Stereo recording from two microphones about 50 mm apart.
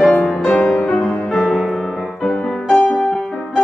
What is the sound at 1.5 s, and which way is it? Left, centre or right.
Music, centre.